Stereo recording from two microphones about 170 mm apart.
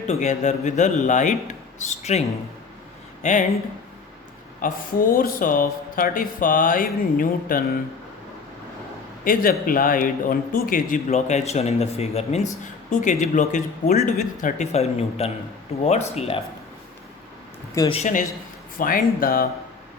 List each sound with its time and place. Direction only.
0.1 s a man's voice: 45° left (ahead or behind)
3.2 s a man's voice: 45° left (ahead or behind)
4.6 s speech: 55° left (ahead or behind)
9.2 s a man's voice: 55° left (ahead or behind); by 16.4 s 35° left (ahead or behind)
17.9 s a man's voice: 45° left (ahead or behind)